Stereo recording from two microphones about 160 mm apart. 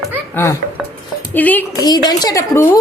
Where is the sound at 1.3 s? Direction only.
10° left (ahead or behind).